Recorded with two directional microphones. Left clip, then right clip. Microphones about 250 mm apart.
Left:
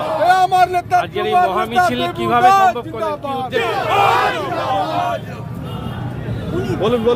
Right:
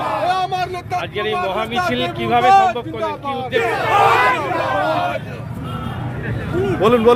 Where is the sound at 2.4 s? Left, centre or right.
Left.